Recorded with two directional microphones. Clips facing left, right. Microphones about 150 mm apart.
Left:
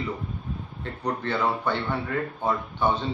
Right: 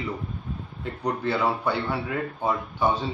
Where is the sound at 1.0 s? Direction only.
10° right (ahead or behind).